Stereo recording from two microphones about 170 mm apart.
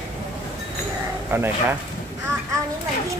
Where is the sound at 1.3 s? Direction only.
15° right (ahead or behind).